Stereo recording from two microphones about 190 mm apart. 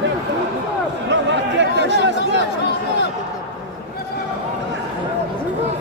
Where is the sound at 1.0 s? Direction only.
65° right (ahead or behind).